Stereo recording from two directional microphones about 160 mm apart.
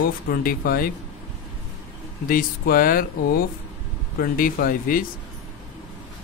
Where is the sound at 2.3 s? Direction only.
65° left (ahead or behind).